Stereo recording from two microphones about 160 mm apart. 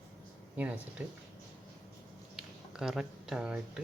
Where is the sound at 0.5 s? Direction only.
10° right (ahead or behind).